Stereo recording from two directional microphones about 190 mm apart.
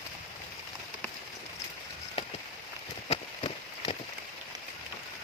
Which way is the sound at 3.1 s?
25° left (ahead or behind).